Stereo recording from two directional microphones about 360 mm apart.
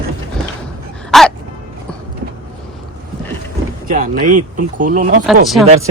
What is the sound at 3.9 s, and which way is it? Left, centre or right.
Speech, right.